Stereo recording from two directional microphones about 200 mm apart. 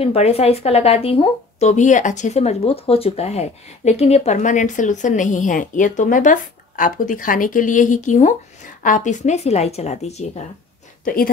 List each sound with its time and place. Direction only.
0.0 s speech: 30° left (ahead or behind)